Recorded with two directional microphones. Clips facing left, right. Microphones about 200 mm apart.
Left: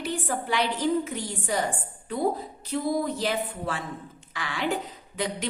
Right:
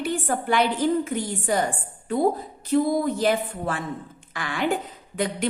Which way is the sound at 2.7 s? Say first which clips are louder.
Right 6 dB; 50° right (ahead or behind).